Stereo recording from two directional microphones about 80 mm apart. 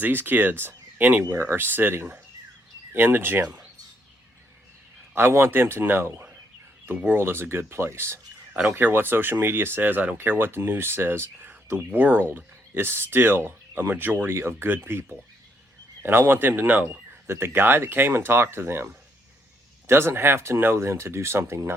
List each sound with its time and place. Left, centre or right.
0.0 s speech: right
5.1 s speech: right